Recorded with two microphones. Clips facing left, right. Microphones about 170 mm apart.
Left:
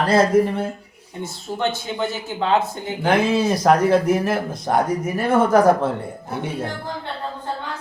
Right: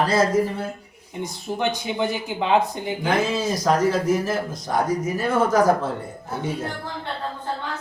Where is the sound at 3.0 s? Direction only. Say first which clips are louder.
Left 5 dB; 60° left (ahead or behind).